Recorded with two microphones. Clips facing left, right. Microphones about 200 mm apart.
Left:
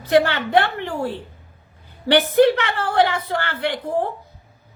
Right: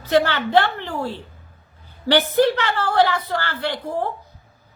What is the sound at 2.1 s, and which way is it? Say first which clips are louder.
A woman's voice: left 2 dB; 20° left (ahead or behind).